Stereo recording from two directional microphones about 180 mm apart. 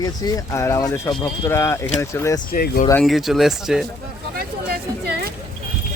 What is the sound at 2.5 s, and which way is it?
Speech, 55° left (ahead or behind).